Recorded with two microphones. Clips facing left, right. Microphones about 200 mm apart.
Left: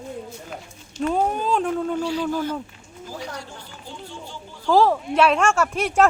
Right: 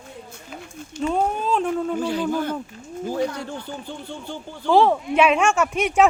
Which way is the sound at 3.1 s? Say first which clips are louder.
Right 9 dB; 55° right (ahead or behind).